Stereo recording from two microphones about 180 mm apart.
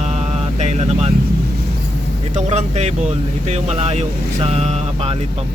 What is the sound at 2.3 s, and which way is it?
Speech, 40° right (ahead or behind).